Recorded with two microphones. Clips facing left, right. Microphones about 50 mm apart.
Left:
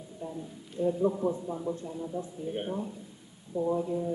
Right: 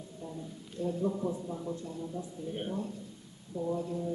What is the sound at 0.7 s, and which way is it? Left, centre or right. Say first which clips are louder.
Speech: left 5 dB; centre.